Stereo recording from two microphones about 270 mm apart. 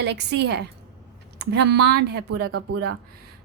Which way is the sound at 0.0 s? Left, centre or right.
Right.